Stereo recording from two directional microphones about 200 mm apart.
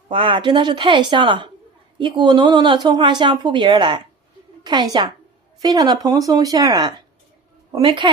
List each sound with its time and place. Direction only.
0.1 s speech: 25° right (ahead or behind)